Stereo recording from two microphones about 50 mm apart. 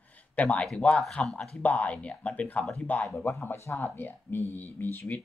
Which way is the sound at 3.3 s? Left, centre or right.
Left.